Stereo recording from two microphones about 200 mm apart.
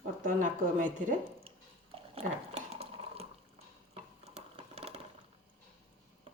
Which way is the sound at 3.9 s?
30° right (ahead or behind).